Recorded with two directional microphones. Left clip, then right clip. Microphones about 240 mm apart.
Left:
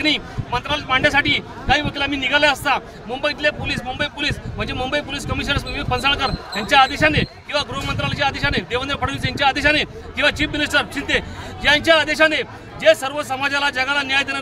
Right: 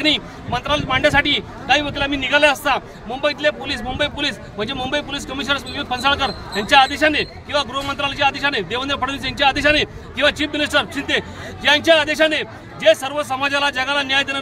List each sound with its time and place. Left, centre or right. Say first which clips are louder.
0.0 s a man's voice: right 1 dB; centre